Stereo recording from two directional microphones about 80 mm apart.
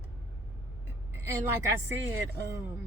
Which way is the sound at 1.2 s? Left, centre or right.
Right.